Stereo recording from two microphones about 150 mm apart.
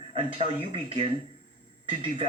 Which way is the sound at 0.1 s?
35° right (ahead or behind).